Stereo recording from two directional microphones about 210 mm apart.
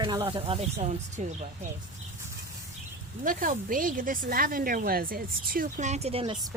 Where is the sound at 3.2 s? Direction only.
40° right (ahead or behind).